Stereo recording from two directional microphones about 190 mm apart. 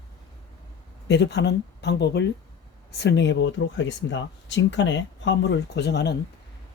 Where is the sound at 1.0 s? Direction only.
65° left (ahead or behind).